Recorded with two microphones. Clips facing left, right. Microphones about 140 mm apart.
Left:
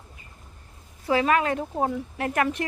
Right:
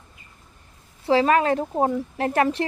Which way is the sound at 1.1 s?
30° right (ahead or behind).